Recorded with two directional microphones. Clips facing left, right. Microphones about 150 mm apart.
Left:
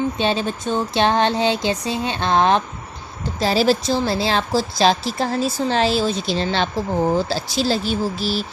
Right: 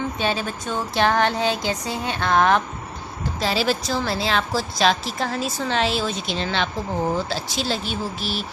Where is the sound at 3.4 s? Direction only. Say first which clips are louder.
Left 5 dB; 40° left (ahead or behind).